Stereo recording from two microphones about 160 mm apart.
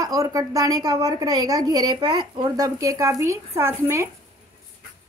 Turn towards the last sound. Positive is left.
turn(degrees=-15)  # may be behind; listen again after turning